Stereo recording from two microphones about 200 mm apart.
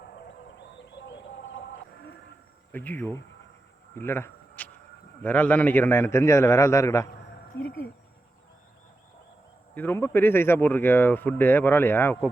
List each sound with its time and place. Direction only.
0.5 s bird: 60° left (ahead or behind)
2.7 s speech: 10° left (ahead or behind)
3.9 s a sound: 10° left (ahead or behind)
5.2 s speech: 10° left (ahead or behind)
7.5 s speech: 70° left (ahead or behind)
9.7 s speech: 10° left (ahead or behind)